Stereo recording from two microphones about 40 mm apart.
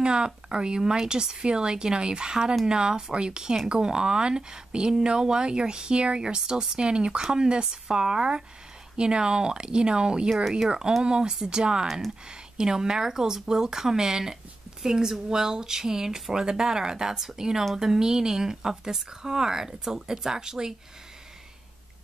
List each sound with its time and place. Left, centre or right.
0.0 s speech: right